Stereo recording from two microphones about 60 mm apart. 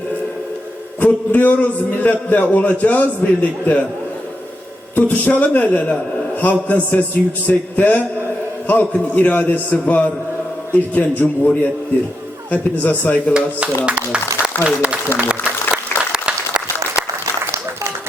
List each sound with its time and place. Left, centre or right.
0.9 s a man's voice: left
4.9 s a man's voice: left
13.8 s a man's voice: centre
16.1 s applause: centre